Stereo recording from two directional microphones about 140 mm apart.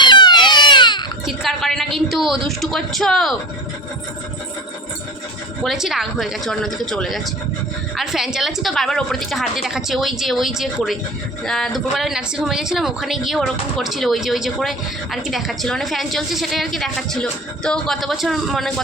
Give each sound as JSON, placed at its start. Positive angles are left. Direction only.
{"t": 0.0, "sound": "baby cry", "side_deg": 35}
{"t": 1.4, "sound": "a sound", "side_deg": 0}
{"t": 2.6, "sound": "speech", "side_deg": 0}
{"t": 5.6, "sound": "speech", "side_deg": -5}